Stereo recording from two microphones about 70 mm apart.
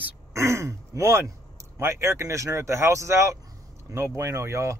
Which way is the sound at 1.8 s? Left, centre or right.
Right.